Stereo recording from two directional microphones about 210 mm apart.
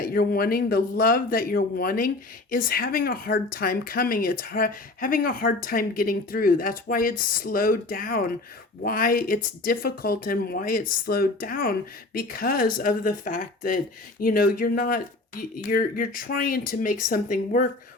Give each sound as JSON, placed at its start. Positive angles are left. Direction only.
{"t": 0.0, "sound": "speech", "side_deg": 45}